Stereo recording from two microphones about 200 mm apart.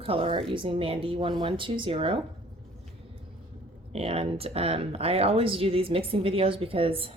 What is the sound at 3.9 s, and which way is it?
Speech, 30° right (ahead or behind).